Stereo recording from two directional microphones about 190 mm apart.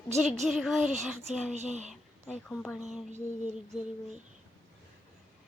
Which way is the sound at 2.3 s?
5° left (ahead or behind).